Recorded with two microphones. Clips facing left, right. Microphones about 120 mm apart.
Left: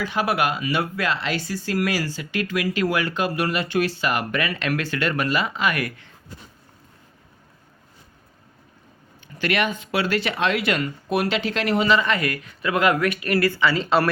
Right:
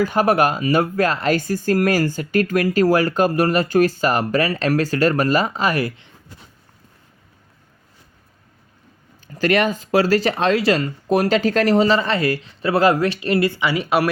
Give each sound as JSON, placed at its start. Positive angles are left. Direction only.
{"t": 0.0, "sound": "speech", "side_deg": -45}
{"t": 9.2, "sound": "speech", "side_deg": -40}